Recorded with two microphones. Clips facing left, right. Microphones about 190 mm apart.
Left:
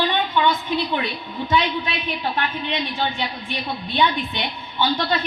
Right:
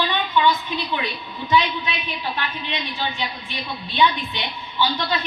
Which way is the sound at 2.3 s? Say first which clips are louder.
Left 4 dB; 50° left (ahead or behind).